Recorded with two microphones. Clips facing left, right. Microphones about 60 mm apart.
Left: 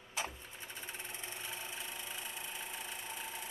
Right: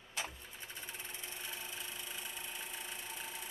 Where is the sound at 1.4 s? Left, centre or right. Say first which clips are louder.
Left 1 dB; centre.